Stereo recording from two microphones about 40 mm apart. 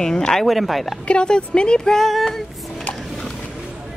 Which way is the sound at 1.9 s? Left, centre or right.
Centre.